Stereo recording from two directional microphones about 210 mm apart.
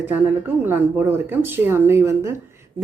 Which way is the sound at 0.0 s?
10° right (ahead or behind).